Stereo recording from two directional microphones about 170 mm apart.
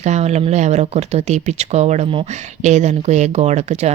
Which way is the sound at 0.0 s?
40° right (ahead or behind).